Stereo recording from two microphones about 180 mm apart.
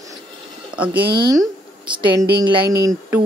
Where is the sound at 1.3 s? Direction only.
20° right (ahead or behind).